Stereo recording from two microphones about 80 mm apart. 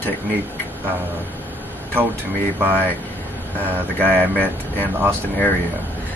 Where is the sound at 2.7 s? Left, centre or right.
Left.